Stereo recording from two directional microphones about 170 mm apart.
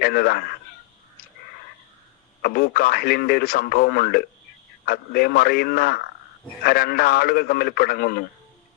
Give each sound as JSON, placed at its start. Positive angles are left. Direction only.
{"t": 0.0, "sound": "speech", "side_deg": 60}
{"t": 2.4, "sound": "speech", "side_deg": 60}